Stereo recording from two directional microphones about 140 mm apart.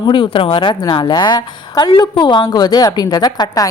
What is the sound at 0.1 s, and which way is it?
A woman's voice, 35° left (ahead or behind).